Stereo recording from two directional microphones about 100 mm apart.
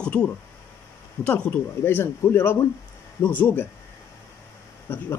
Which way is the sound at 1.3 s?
20° left (ahead or behind).